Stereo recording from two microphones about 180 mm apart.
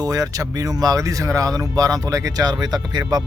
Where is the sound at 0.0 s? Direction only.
20° right (ahead or behind).